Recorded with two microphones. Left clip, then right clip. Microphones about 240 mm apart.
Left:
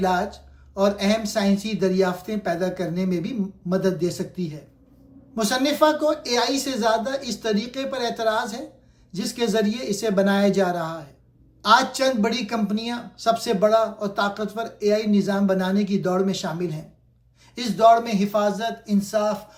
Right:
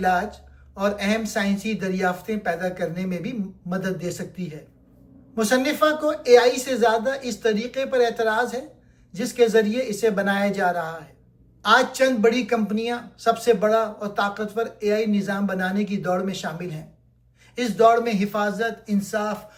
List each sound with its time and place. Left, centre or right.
0.0 s speech: left